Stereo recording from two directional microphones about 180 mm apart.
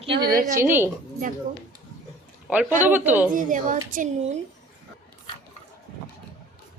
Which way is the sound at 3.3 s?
45° right (ahead or behind).